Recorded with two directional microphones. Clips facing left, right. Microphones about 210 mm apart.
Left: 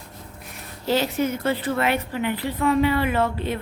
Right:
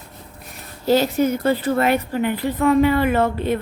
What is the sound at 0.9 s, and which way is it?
A woman's voice, 40° right (ahead or behind).